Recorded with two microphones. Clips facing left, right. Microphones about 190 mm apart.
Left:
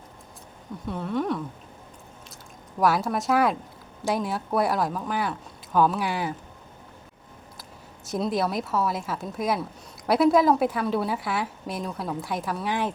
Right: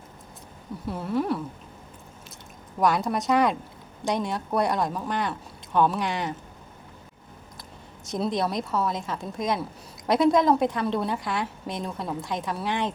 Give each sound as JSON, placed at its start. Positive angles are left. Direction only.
{"t": 0.9, "sound": "a woman's voice", "side_deg": -5}
{"t": 2.7, "sound": "a woman's voice", "side_deg": 5}
{"t": 8.0, "sound": "a woman's voice", "side_deg": 5}